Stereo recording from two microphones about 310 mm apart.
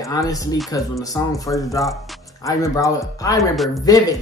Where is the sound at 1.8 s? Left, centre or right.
Centre.